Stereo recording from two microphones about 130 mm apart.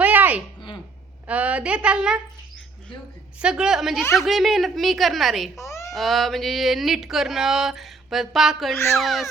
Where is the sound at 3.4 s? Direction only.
5° right (ahead or behind).